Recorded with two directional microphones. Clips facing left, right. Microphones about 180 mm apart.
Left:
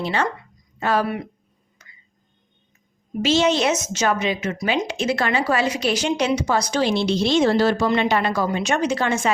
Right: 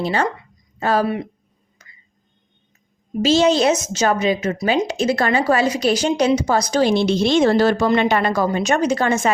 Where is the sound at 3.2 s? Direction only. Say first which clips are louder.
Right 4 dB; 35° right (ahead or behind).